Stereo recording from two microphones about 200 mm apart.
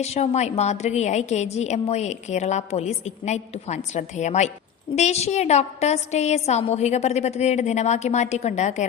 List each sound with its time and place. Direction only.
0.0 s a woman's voice: 35° left (ahead or behind)